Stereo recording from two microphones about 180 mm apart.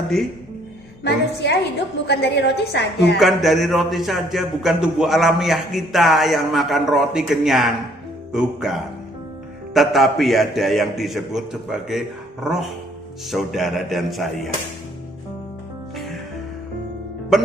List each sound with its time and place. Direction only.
1.0 s a woman's voice: 70° left (ahead or behind)
3.2 s a man's voice: centre (ahead or behind)
9.7 s a man's voice: centre (ahead or behind)
17.3 s a man's voice: centre (ahead or behind)